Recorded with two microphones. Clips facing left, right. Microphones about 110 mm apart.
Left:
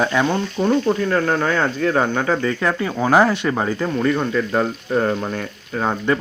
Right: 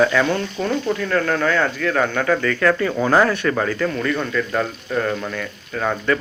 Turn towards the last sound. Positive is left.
turn(degrees=35)  # may be behind; listen again after turning